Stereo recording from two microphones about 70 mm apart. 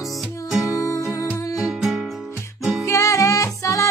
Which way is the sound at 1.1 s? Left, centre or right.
Left.